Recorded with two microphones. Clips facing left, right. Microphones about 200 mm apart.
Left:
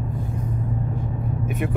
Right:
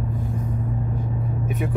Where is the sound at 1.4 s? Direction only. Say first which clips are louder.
Left 1 dB; centre (ahead or behind).